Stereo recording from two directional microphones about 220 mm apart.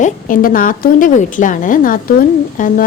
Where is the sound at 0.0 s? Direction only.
40° left (ahead or behind).